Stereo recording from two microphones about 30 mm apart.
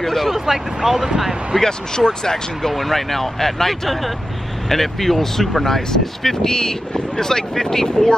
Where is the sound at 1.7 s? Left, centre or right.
Left.